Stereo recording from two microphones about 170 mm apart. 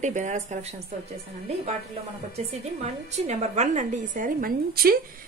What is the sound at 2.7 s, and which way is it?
Speech, 40° right (ahead or behind).